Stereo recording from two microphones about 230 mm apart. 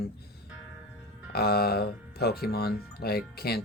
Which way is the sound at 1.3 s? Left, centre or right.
Left.